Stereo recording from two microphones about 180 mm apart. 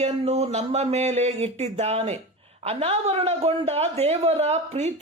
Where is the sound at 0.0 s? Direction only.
35° right (ahead or behind).